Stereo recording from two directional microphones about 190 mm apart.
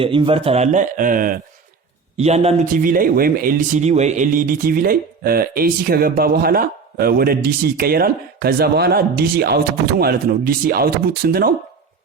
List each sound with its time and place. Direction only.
0.0 s a man's voice: 30° right (ahead or behind); by 1.4 s 45° right (ahead or behind)
2.1 s a man's voice: 35° right (ahead or behind)
2.8 s speech: 45° right (ahead or behind)